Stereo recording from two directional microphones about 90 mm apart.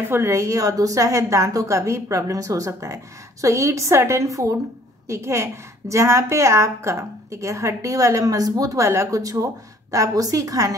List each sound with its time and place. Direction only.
0.1 s a woman's voice: 30° right (ahead or behind)